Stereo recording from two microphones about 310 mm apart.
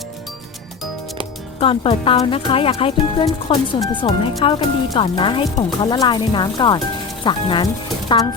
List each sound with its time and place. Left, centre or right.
1.5 s speech: centre